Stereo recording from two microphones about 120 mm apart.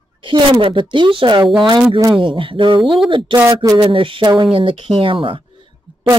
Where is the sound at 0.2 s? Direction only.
45° right (ahead or behind).